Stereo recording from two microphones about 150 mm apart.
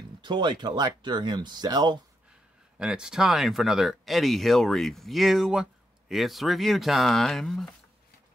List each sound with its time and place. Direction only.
0.2 s speech: 30° right (ahead or behind)
2.8 s speech: 5° right (ahead or behind)